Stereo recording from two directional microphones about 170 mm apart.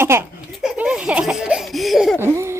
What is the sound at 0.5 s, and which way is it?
Laughter, 5° right (ahead or behind).